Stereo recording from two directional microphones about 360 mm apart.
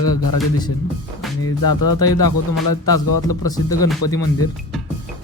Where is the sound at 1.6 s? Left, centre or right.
Left.